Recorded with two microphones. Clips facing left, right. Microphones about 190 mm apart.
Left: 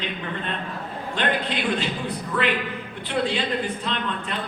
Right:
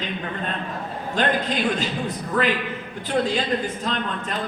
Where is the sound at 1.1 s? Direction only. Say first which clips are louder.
Right 3 dB; 40° right (ahead or behind).